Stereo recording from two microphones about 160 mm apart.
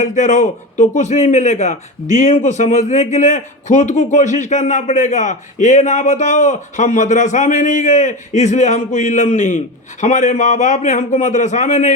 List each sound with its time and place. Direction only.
0.0 s a man's voice: 50° left (ahead or behind)